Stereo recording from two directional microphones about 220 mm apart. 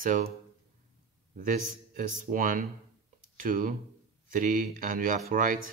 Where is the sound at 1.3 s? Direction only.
35° right (ahead or behind).